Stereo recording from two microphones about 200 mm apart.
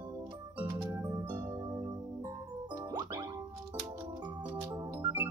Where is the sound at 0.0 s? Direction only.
20° right (ahead or behind).